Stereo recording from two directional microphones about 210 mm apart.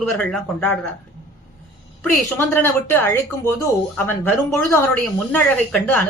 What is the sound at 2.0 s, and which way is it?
Speech, 10° left (ahead or behind).